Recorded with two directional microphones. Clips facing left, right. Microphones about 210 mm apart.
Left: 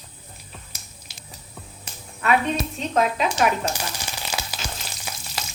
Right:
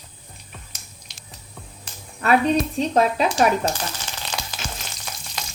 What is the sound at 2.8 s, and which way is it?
Speech, 35° right (ahead or behind).